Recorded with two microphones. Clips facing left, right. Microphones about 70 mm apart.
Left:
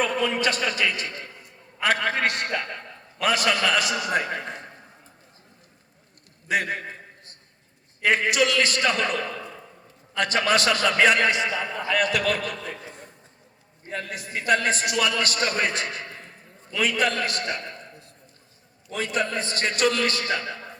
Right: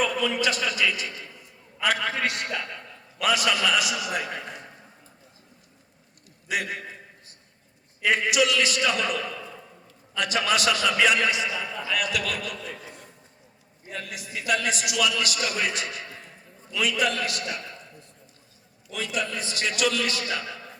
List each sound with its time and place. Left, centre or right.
0.3 s a man's voice: left
0.6 s a sound: left
2.0 s a man's voice: left
6.5 s a sound: left
8.0 s a man's voice: left
13.8 s a man's voice: left